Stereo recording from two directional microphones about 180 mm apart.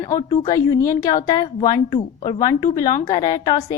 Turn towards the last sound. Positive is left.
turn(degrees=20)  # may be behind; listen again after turning